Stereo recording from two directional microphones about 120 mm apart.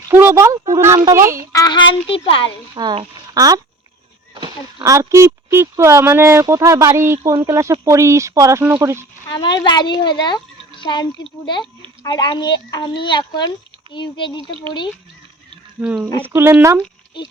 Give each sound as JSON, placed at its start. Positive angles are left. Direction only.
{"t": 0.1, "sound": "speech", "side_deg": -20}
{"t": 1.5, "sound": "a child's voice", "side_deg": 35}
{"t": 2.7, "sound": "speech", "side_deg": -45}
{"t": 3.3, "sound": "speech", "side_deg": -30}
{"t": 9.3, "sound": "a child's voice", "side_deg": 40}
{"t": 15.8, "sound": "speech", "side_deg": -10}
{"t": 16.2, "sound": "speech", "side_deg": -20}